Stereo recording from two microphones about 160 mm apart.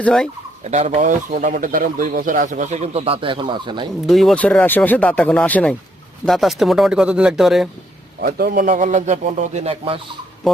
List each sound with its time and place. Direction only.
0.0 s speech: 5° left (ahead or behind)
0.6 s speech: 45° right (ahead or behind); by 3.8 s 30° right (ahead or behind)
4.0 s speech: centre (ahead or behind)
8.2 s speech: 70° right (ahead or behind); by 10.0 s 40° right (ahead or behind)
10.4 s speech: centre (ahead or behind)